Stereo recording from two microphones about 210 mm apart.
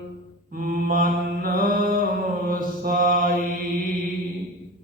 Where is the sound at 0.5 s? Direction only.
40° right (ahead or behind).